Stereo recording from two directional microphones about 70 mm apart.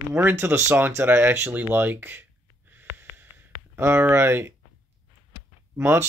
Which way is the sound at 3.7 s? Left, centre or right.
Right.